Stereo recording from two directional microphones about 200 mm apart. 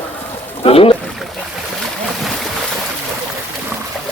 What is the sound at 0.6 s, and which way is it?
Speech, 30° left (ahead or behind).